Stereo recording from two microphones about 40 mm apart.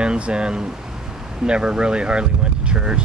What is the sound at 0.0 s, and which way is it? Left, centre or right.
Speech, right.